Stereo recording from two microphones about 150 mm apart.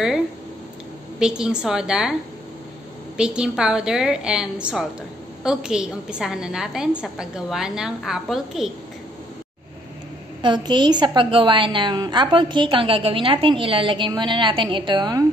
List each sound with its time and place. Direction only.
1.2 s a woman's voice: 5° right (ahead or behind)
3.2 s a woman's voice: 5° right (ahead or behind)
10.4 s a woman's voice: 30° right (ahead or behind)